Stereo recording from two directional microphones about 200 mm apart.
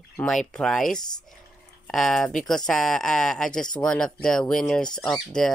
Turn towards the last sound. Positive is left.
turn(degrees=5)  # may be behind; listen again after turning